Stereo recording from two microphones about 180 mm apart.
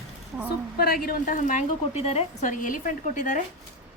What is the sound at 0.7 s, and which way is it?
A woman's voice, 55° left (ahead or behind).